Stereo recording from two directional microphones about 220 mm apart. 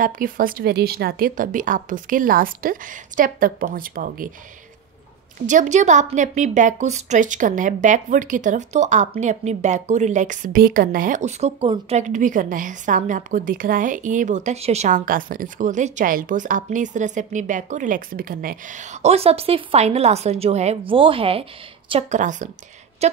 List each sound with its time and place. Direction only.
0.0 s a woman's voice: 40° right (ahead or behind)
5.5 s a woman's voice: 35° right (ahead or behind)